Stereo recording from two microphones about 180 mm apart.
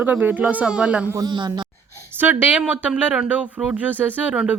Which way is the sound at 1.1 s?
25° right (ahead or behind).